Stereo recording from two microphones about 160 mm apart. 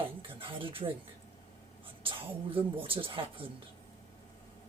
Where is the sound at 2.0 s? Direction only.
35° right (ahead or behind).